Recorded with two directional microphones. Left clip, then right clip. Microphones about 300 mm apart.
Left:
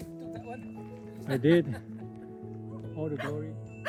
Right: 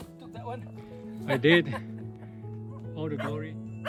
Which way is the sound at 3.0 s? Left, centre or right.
Centre.